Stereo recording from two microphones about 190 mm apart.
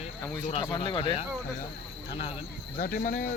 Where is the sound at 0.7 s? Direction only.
25° left (ahead or behind).